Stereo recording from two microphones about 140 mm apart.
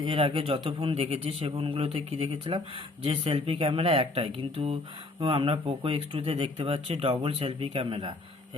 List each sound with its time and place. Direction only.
0.0 s a man's voice: 40° right (ahead or behind)